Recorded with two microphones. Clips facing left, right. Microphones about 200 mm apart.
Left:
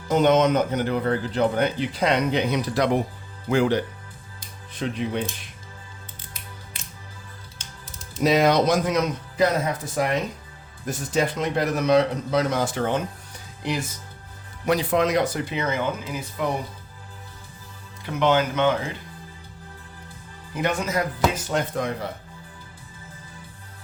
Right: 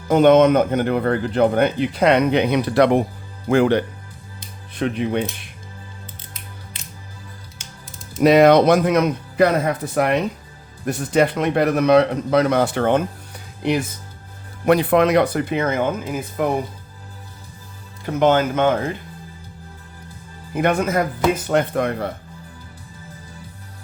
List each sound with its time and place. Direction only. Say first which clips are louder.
0.1 s speech: right 6 dB; 55° right (ahead or behind)
7.6 s music: right 1 dB; 10° right (ahead or behind)
8.2 s speech: right 7 dB; 60° right (ahead or behind)
18.0 s speech: right 4 dB; 45° right (ahead or behind)
20.5 s speech: right 6 dB; 55° right (ahead or behind)